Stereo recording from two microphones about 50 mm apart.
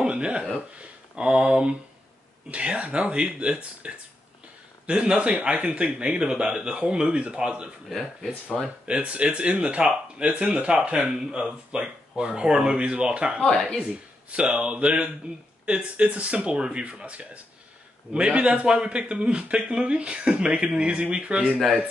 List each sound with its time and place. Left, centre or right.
0.0 s a sound: right
0.7 s a man's voice: right
8.8 s a man's voice: right